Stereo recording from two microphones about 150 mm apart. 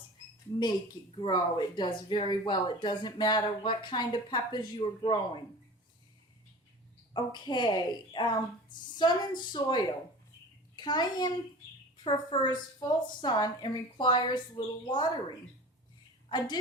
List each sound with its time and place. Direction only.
1.1 s speech: 30° left (ahead or behind)
7.1 s a woman's voice: 30° left (ahead or behind)